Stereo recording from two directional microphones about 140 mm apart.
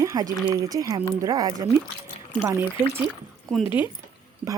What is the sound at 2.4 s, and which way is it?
Speech, 15° right (ahead or behind).